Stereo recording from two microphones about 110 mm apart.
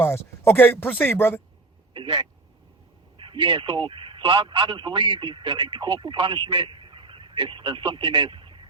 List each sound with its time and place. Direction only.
0.0 s speech: 20° left (ahead or behind)
1.9 s a man's voice: 50° right (ahead or behind)